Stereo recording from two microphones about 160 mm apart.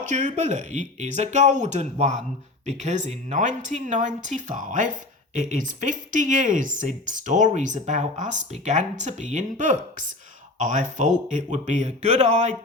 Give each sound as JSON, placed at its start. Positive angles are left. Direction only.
{"t": 0.0, "sound": "speech", "side_deg": -50}